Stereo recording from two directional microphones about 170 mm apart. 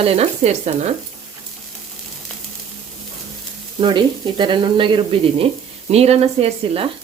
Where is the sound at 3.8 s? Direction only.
30° right (ahead or behind).